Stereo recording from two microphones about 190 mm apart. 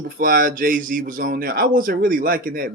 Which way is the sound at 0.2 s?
50° right (ahead or behind).